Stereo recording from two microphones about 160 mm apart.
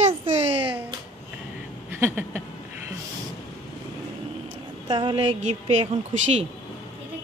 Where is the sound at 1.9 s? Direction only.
15° right (ahead or behind).